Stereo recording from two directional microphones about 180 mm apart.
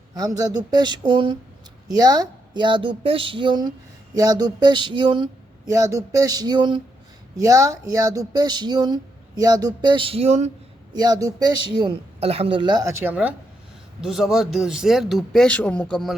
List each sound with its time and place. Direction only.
0.1 s speech: 20° right (ahead or behind); by 10.5 s 40° right (ahead or behind)
10.9 s speech: 20° right (ahead or behind); by 16.1 s centre (ahead or behind)